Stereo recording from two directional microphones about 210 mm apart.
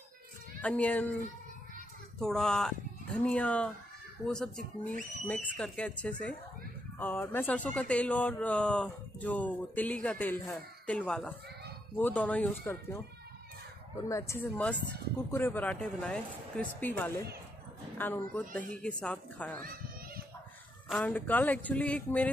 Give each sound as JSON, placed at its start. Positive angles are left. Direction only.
{"t": 0.6, "sound": "speech", "side_deg": 5}
{"t": 2.1, "sound": "speech", "side_deg": 0}
{"t": 14.0, "sound": "speech", "side_deg": 15}
{"t": 19.6, "sound": "children playing", "side_deg": -45}
{"t": 20.9, "sound": "speech", "side_deg": 10}